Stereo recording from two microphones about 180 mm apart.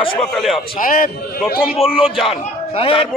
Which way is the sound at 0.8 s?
50° left (ahead or behind).